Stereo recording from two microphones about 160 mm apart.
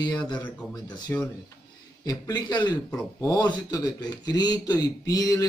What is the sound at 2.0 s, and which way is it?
A man's voice, 25° left (ahead or behind).